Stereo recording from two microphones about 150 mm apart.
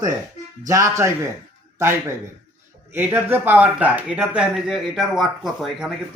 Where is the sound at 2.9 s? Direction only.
10° right (ahead or behind).